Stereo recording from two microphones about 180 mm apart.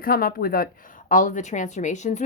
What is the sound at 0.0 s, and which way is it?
A woman's voice, 55° left (ahead or behind).